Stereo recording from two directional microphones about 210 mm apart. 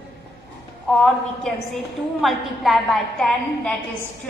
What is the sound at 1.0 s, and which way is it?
A woman's voice, centre (ahead or behind).